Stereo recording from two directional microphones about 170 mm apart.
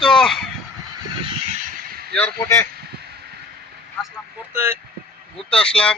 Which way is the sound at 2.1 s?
15° left (ahead or behind).